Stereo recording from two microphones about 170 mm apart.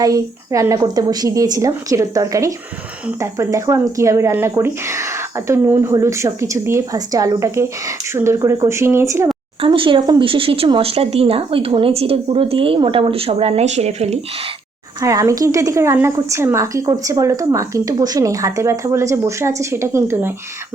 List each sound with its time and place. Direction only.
0.0 s a woman's voice: 20° right (ahead or behind)
9.6 s speech: 30° right (ahead or behind)
15.0 s speech: 20° right (ahead or behind)